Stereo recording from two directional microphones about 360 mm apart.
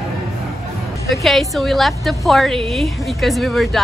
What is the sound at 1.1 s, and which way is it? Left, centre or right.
A woman's voice, centre.